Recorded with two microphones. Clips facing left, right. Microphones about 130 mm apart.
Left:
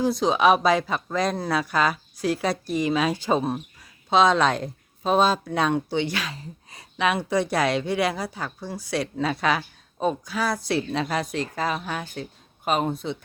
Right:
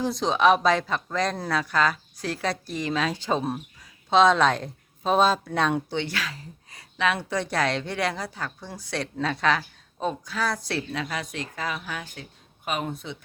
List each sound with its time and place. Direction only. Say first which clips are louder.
0.0 s speech: left 2 dB; 5° left (ahead or behind)
10.9 s speech: left 6 dB; 35° left (ahead or behind)